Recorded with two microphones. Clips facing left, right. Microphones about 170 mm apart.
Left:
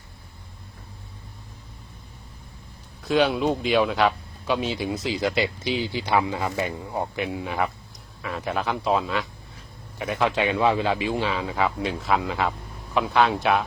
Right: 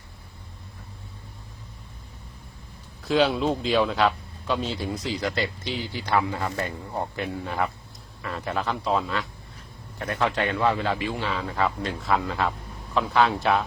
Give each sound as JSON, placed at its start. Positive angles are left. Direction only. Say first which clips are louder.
{"t": 3.0, "sound": "speech", "louder": "left 1 dB", "side_deg": 0}
{"t": 5.0, "sound": "a man's voice", "louder": "left 4 dB", "side_deg": 15}
{"t": 8.8, "sound": "a man's voice", "louder": "left 2 dB", "side_deg": 10}
{"t": 10.3, "sound": "a man's voice", "louder": "left 2 dB", "side_deg": 15}